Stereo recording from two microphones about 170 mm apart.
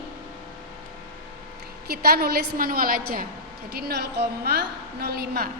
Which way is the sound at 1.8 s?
65° right (ahead or behind).